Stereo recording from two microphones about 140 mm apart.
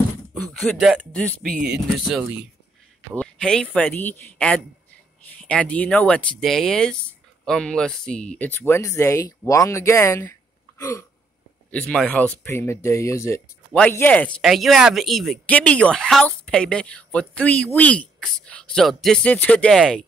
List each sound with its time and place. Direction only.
0.3 s speech: 5° left (ahead or behind)
3.2 s speech: 5° left (ahead or behind); by 10.3 s 20° left (ahead or behind)
10.8 s a sound: 20° left (ahead or behind)
11.7 s speech: 5° left (ahead or behind)
13.7 s speech: 10° left (ahead or behind)